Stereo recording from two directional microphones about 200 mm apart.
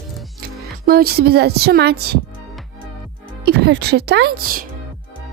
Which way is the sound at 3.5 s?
55° right (ahead or behind).